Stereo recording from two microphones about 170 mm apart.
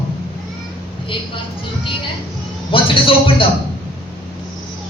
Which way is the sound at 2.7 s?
30° left (ahead or behind).